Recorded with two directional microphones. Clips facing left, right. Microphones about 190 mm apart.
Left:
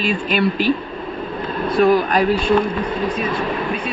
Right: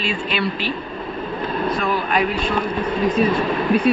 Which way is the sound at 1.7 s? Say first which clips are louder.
Left 10 dB; 40° left (ahead or behind).